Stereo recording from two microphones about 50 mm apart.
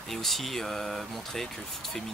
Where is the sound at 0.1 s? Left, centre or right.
Centre.